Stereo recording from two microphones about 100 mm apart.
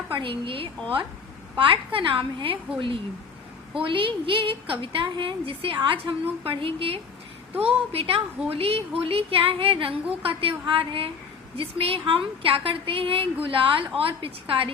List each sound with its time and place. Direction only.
0.1 s a woman's voice: 60° right (ahead or behind)
3.8 s a woman's voice: 60° right (ahead or behind)